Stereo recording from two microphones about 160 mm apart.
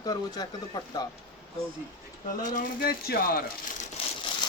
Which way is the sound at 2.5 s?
75° left (ahead or behind).